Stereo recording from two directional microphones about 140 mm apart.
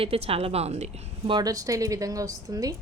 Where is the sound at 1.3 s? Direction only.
25° right (ahead or behind).